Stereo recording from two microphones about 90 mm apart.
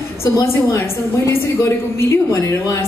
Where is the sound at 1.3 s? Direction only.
30° left (ahead or behind).